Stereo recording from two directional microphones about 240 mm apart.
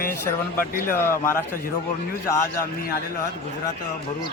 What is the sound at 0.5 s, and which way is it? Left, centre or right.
Speech, left.